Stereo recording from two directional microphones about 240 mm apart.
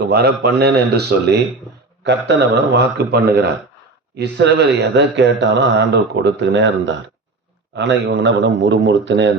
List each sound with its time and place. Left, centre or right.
0.1 s speech: right